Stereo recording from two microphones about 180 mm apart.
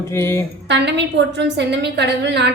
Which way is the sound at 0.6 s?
75° right (ahead or behind).